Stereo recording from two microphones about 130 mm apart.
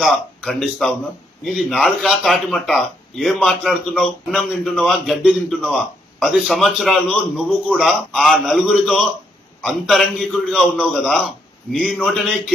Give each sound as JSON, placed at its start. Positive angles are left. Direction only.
{"t": 0.0, "sound": "a man's voice", "side_deg": 0}